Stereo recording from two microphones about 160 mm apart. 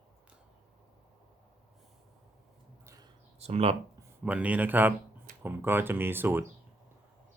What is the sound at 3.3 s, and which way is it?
Speech, 40° right (ahead or behind).